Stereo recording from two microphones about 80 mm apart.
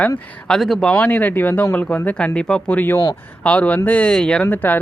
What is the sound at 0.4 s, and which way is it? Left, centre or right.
Speech, centre.